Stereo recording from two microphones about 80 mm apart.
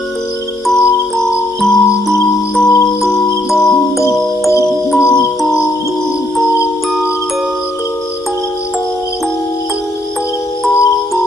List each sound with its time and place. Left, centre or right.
0.7 s music: centre
4.0 s music: left
4.9 s music: centre